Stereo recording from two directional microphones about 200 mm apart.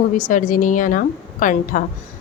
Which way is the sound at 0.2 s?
40° left (ahead or behind).